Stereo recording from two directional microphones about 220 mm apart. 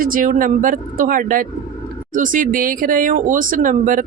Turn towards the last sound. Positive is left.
turn(degrees=-40)  # may be behind; listen again after turning